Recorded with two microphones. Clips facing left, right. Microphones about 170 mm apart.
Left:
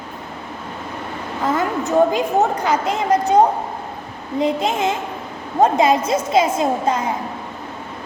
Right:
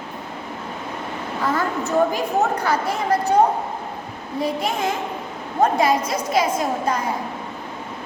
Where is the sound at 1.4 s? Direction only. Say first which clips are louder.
Left 3 dB; 20° left (ahead or behind).